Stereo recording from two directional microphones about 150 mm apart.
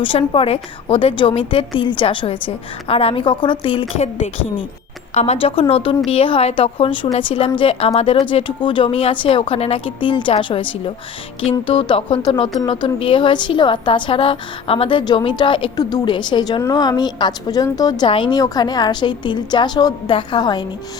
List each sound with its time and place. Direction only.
0.0 s speech: 35° left (ahead or behind)